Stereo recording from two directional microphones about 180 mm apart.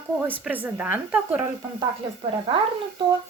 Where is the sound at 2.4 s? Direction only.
25° right (ahead or behind).